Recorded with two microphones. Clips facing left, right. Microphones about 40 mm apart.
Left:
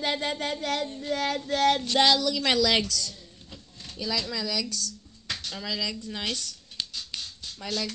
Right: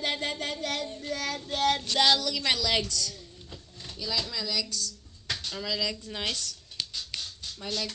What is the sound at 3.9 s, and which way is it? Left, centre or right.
Speech, left.